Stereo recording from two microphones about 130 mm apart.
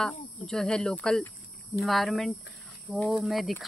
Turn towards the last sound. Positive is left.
turn(degrees=0)  # may be behind; listen again after turning